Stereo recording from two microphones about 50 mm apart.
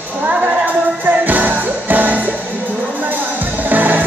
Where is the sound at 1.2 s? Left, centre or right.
Right.